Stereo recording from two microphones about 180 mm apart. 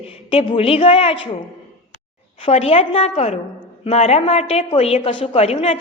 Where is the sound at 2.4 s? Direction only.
35° left (ahead or behind).